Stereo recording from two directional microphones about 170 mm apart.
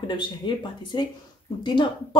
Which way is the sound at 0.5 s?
25° left (ahead or behind).